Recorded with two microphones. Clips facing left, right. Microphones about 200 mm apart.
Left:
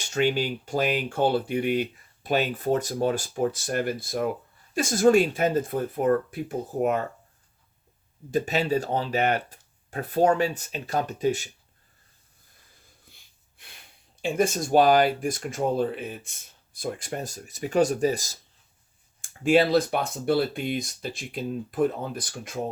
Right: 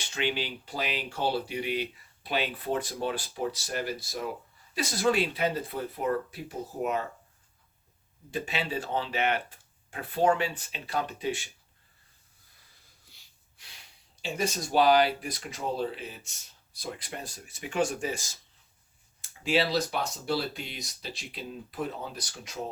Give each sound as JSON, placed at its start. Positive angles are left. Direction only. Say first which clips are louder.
{"t": 0.0, "sound": "speech", "louder": "left 7 dB", "side_deg": 45}
{"t": 8.3, "sound": "speech", "louder": "left 8 dB", "side_deg": 40}
{"t": 13.1, "sound": "wheeze", "louder": "left 4 dB", "side_deg": 55}
{"t": 14.2, "sound": "speech", "louder": "left 7 dB", "side_deg": 50}
{"t": 19.2, "sound": "speech", "louder": "left 7 dB", "side_deg": 50}